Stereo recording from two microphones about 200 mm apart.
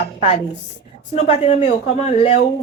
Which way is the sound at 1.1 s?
35° left (ahead or behind).